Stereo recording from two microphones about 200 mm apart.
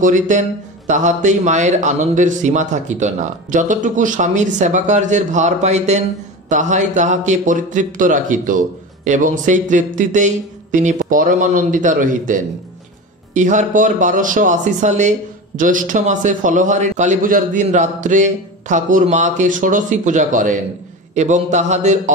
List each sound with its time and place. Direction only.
0.0 s speech: 40° right (ahead or behind)